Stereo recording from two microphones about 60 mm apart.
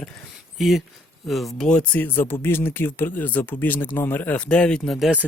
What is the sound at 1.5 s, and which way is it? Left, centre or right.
Speech, centre.